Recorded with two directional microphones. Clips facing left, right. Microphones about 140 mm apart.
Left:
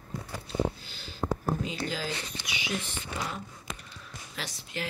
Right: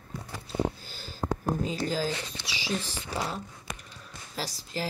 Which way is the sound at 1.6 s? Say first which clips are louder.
Right 4 dB; 40° right (ahead or behind).